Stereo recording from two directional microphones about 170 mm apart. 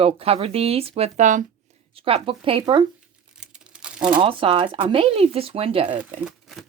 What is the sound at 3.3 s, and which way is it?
Crumpling, 5° right (ahead or behind).